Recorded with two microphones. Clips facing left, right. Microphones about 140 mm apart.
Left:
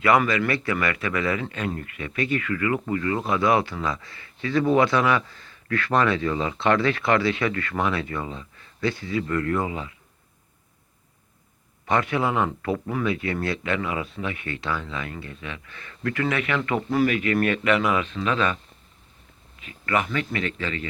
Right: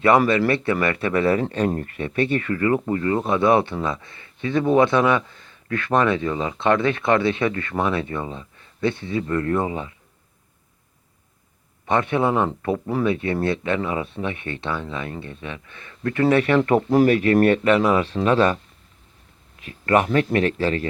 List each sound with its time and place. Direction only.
0.0 s speech: 30° right (ahead or behind)
11.9 s a man's voice: 25° right (ahead or behind); by 20.8 s 40° right (ahead or behind)